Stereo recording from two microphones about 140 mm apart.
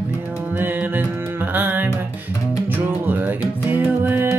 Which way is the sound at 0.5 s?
15° right (ahead or behind).